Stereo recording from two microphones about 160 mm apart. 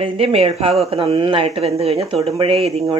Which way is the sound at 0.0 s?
35° right (ahead or behind).